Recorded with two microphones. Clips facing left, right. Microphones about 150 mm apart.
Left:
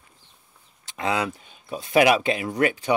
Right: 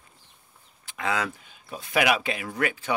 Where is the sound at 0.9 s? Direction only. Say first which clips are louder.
Left 3 dB; 20° left (ahead or behind).